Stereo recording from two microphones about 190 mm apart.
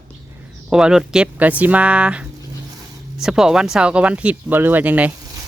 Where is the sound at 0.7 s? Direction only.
5° right (ahead or behind).